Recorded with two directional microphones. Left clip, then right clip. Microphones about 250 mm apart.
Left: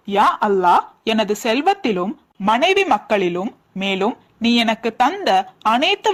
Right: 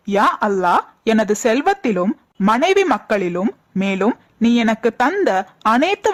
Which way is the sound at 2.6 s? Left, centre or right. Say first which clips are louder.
Right 1 dB; right.